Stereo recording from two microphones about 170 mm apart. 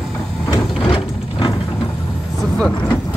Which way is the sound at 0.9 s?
30° left (ahead or behind).